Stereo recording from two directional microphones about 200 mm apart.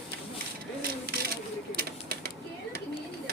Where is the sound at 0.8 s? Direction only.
50° right (ahead or behind).